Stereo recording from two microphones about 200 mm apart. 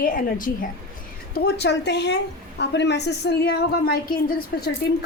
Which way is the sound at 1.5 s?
55° left (ahead or behind).